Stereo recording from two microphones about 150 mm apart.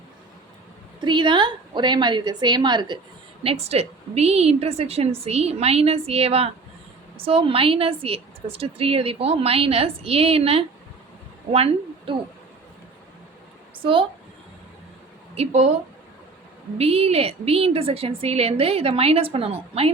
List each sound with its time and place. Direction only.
1.0 s a woman's voice: 30° right (ahead or behind)
3.4 s a woman's voice: 40° right (ahead or behind)
15.4 s a woman's voice: 45° right (ahead or behind)
16.7 s a woman's voice: 45° right (ahead or behind)